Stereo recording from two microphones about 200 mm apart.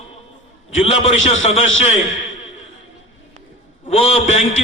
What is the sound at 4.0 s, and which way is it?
Speech, 30° left (ahead or behind).